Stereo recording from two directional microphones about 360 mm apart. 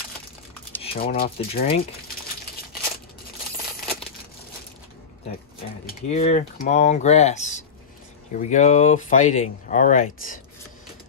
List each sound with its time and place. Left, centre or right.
1.0 s speech: left
5.9 s speech: centre